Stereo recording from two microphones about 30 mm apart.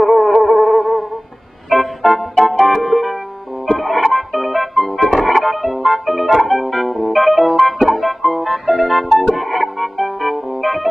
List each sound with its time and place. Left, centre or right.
0.0 s music: centre